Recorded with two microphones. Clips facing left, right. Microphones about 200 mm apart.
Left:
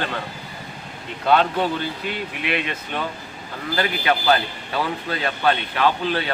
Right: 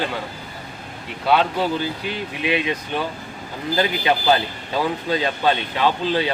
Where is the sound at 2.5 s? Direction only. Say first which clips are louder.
Right 5 dB; 15° right (ahead or behind).